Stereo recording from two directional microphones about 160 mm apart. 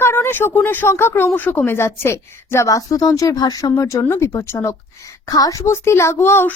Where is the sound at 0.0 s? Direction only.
15° left (ahead or behind).